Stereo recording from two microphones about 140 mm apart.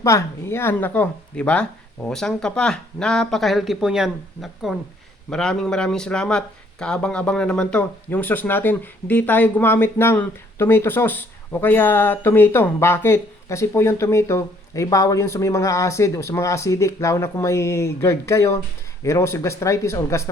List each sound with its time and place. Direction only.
0.0 s speech: 20° left (ahead or behind)